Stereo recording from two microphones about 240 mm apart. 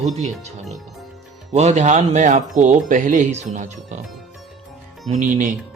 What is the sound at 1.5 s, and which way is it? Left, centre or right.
A man's voice, right.